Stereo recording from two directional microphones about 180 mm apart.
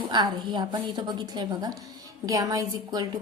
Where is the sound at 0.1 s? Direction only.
25° right (ahead or behind).